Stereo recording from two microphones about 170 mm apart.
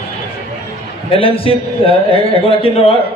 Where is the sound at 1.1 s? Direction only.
35° left (ahead or behind).